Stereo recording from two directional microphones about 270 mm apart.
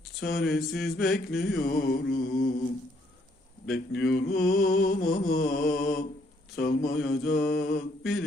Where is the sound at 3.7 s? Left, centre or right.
Left.